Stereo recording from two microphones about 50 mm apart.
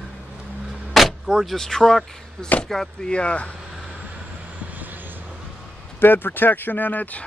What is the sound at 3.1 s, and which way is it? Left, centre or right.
Speech, left.